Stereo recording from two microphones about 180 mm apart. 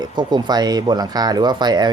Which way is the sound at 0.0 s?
25° right (ahead or behind).